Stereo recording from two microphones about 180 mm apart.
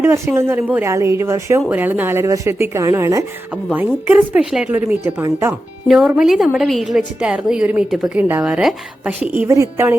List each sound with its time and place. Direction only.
0.0 s speech: 15° right (ahead or behind)
5.9 s a woman's voice: centre (ahead or behind)